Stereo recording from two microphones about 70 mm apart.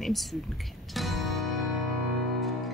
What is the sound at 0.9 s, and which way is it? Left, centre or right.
Music, centre.